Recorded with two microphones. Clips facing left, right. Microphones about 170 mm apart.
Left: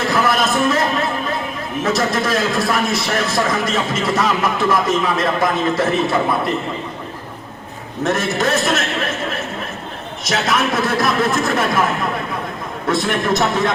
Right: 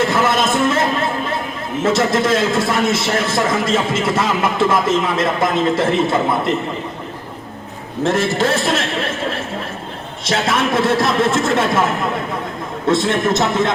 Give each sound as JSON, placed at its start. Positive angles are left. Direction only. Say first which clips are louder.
{"t": 0.1, "sound": "a sound", "louder": "right 1 dB", "side_deg": -25}
{"t": 1.8, "sound": "a man's voice", "louder": "right 3 dB", "side_deg": -25}
{"t": 8.0, "sound": "a man's voice", "louder": "right 2 dB", "side_deg": -30}
{"t": 10.2, "sound": "a man's voice", "louder": "right 1 dB", "side_deg": -30}
{"t": 12.9, "sound": "a man's voice", "louder": "right 2 dB", "side_deg": -25}